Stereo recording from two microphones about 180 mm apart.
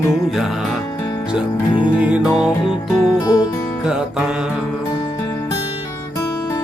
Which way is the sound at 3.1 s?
20° left (ahead or behind).